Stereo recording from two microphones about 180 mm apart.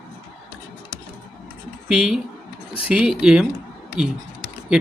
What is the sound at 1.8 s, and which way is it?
Speech, 5° right (ahead or behind).